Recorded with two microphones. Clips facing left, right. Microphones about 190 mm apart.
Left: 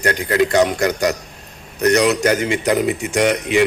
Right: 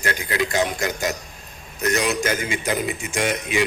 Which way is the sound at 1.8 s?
40° left (ahead or behind).